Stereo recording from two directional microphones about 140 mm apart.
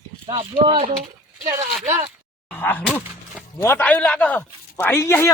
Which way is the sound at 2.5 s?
15° left (ahead or behind).